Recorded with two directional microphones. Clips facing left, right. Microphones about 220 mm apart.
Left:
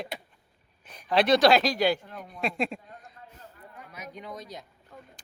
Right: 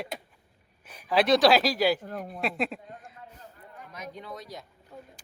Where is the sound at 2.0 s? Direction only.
45° right (ahead or behind).